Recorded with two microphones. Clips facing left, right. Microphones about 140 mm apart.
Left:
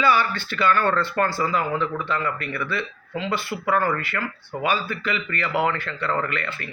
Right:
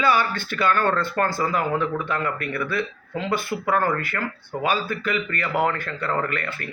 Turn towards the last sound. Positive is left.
turn(degrees=-45)  # may be behind; listen again after turning